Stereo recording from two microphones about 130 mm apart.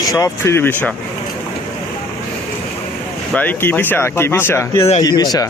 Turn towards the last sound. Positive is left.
turn(degrees=30)  # may be behind; listen again after turning